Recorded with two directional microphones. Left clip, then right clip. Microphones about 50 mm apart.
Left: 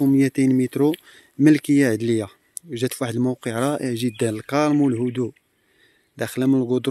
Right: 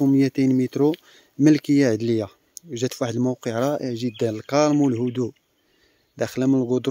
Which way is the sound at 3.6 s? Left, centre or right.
Left.